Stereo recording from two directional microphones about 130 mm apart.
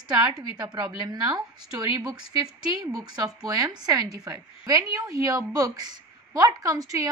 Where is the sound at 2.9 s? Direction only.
30° right (ahead or behind).